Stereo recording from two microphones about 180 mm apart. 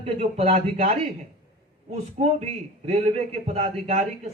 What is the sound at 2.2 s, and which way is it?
Speech, 40° right (ahead or behind).